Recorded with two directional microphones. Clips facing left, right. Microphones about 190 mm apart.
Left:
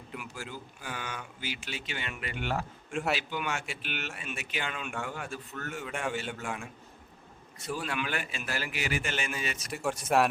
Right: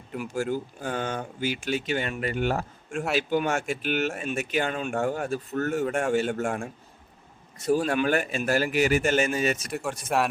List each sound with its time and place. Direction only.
0.2 s speech: 50° right (ahead or behind)
9.7 s speech: centre (ahead or behind)